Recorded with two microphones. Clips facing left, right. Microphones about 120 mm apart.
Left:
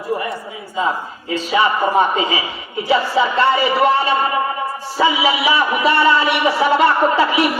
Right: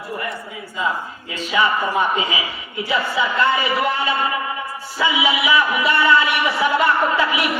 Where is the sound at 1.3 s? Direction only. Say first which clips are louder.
Left 3 dB; 35° left (ahead or behind).